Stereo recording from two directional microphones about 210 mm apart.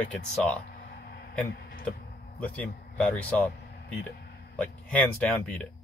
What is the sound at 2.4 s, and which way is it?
Speech, 5° left (ahead or behind).